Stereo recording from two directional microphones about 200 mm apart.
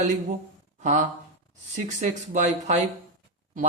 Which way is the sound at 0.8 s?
40° right (ahead or behind).